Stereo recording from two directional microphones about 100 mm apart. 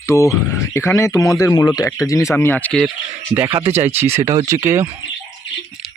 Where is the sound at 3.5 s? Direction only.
55° right (ahead or behind).